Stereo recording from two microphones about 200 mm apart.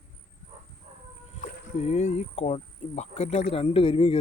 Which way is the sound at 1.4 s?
35° left (ahead or behind).